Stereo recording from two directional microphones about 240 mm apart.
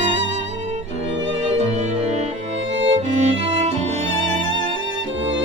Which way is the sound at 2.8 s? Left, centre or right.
Right.